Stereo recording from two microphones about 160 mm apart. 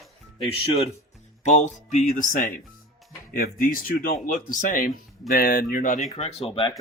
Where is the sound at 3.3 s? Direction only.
70° left (ahead or behind).